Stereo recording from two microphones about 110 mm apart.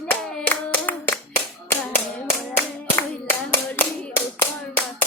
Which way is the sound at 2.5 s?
20° left (ahead or behind).